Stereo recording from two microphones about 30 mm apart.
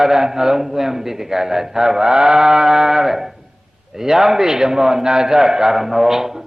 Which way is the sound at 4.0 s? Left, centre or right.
Centre.